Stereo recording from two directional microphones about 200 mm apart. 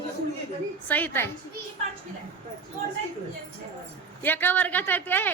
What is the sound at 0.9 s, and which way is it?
Speech, 10° left (ahead or behind).